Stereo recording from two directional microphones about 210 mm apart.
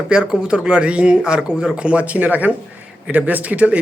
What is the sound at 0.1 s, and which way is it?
A man's voice, 5° right (ahead or behind).